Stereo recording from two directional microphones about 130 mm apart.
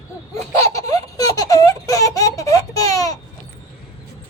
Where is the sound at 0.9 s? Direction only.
25° left (ahead or behind).